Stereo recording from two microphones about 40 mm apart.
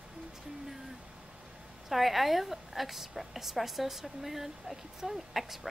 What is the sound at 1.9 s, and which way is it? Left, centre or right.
A woman's voice, centre.